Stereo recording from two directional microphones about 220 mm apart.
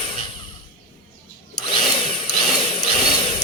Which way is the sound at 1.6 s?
20° left (ahead or behind).